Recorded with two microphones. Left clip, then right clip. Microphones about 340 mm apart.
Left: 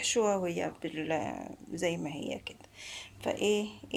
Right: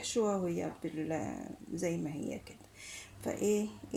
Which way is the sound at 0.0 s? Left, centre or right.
Left.